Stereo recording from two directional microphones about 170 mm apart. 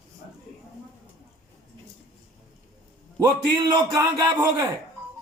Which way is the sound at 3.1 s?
25° right (ahead or behind).